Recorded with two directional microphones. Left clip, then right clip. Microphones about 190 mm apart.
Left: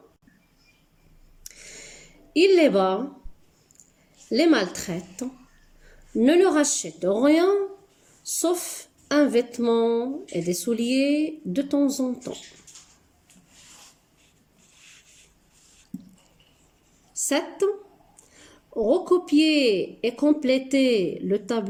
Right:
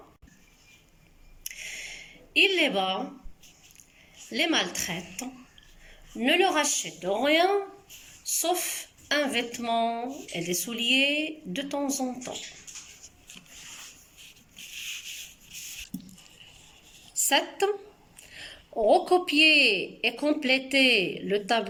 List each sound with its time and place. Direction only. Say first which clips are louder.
1.5 s a sound: right 6 dB; 50° left (ahead or behind)
2.5 s speech: left 7 dB; 50° left (ahead or behind)
4.3 s speech: left 6 dB; 50° left (ahead or behind)
18.9 s speech: even; 50° left (ahead or behind)